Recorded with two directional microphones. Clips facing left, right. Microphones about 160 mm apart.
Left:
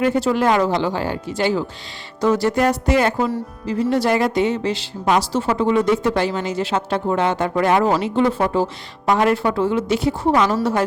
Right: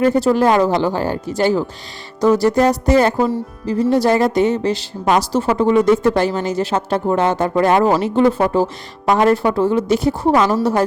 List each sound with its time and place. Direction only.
0.0 s speech: 40° right (ahead or behind)